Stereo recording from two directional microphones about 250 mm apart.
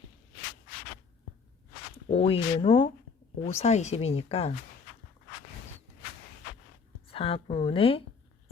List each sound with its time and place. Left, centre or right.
2.0 s speech: left
7.1 s speech: left